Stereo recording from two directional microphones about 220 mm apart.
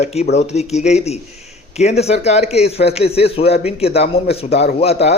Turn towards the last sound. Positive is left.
turn(degrees=25)  # may be behind; listen again after turning